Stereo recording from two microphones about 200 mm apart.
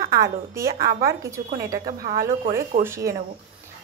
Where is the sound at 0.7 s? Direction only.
50° right (ahead or behind).